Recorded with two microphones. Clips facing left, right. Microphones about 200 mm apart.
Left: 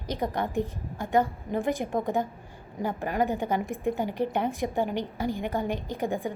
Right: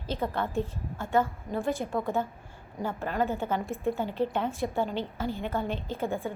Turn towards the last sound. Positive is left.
turn(degrees=15)  # may be behind; listen again after turning